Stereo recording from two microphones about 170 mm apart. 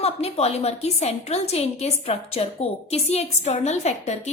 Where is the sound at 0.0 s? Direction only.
40° left (ahead or behind).